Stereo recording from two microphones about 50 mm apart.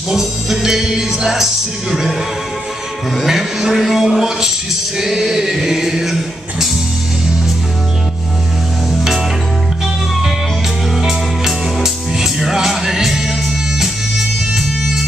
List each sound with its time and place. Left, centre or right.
0.1 s music: centre
3.2 s music: centre
11.0 s music: centre